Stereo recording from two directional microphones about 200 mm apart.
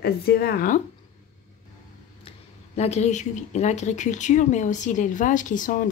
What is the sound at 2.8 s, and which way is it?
Speech, 35° left (ahead or behind).